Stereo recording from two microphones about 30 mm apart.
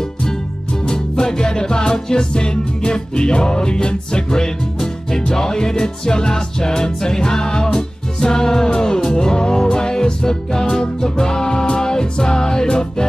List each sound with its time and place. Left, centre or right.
0.8 s music: left